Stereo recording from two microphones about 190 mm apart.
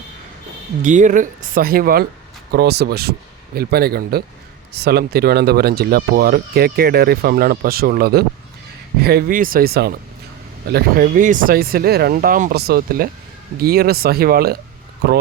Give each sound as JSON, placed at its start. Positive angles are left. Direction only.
{"t": 0.8, "sound": "speech", "side_deg": -40}